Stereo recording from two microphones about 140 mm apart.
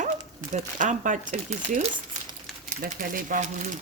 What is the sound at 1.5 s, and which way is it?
Speech, 50° right (ahead or behind).